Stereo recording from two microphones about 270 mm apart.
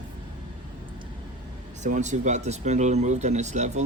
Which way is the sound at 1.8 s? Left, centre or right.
Right.